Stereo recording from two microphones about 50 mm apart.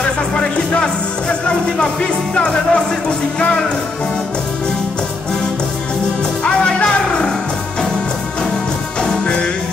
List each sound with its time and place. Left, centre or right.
2.3 s music: centre
6.4 s music: left